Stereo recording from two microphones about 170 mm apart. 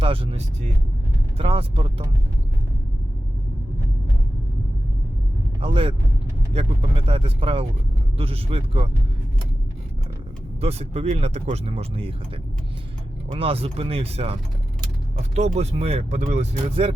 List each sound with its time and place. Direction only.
0.0 s speech: 30° right (ahead or behind)
5.5 s speech: 30° right (ahead or behind)
10.6 s speech: 35° right (ahead or behind)
13.2 s speech: 35° right (ahead or behind)
15.4 s speech: 35° right (ahead or behind)